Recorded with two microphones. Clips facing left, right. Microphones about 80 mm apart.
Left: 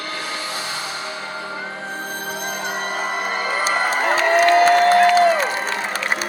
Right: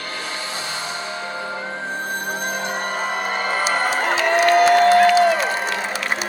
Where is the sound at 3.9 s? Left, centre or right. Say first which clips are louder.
Left 1 dB; left.